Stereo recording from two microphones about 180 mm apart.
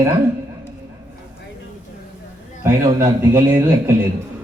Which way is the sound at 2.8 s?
20° right (ahead or behind).